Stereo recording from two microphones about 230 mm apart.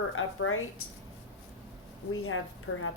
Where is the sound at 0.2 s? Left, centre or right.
Left.